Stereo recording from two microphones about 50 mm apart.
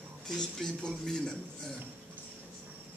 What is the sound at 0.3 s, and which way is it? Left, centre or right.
Speech, centre.